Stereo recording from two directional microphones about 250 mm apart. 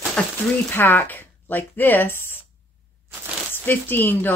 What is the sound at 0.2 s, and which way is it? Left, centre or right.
Speech, centre.